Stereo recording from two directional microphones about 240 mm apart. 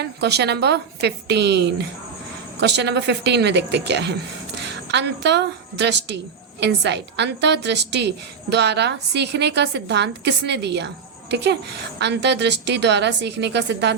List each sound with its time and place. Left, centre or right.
0.0 s a woman's voice: right